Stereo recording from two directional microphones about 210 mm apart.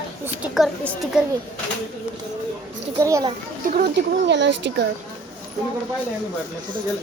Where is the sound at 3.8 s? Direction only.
55° right (ahead or behind).